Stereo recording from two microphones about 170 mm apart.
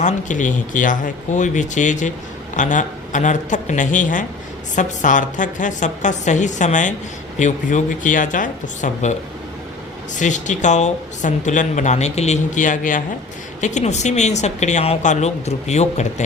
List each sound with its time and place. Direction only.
0.0 s speech: 45° left (ahead or behind)
10.2 s speech: 45° left (ahead or behind)